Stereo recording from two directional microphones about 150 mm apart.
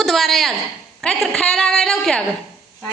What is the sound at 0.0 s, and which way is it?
A woman's voice, centre (ahead or behind).